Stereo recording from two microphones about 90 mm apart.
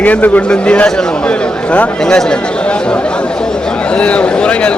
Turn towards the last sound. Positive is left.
turn(degrees=10)  # may be behind; listen again after turning